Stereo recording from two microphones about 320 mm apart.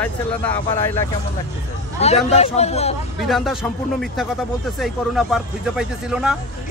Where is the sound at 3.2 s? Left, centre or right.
Centre.